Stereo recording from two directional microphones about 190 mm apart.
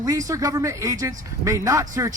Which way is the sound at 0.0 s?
15° right (ahead or behind).